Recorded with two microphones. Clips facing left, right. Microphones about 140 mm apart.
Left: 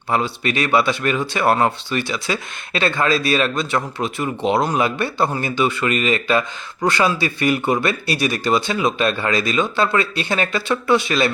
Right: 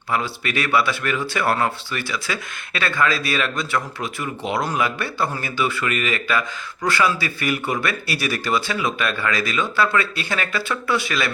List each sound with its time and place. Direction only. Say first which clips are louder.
0.1 s speech: left 3 dB; 25° left (ahead or behind)